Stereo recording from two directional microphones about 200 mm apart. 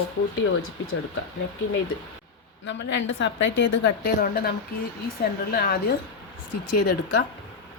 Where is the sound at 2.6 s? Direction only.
65° left (ahead or behind).